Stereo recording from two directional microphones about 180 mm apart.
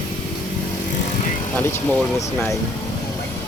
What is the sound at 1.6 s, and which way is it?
Speech, 10° left (ahead or behind).